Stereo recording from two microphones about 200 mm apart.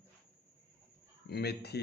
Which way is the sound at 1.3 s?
55° left (ahead or behind).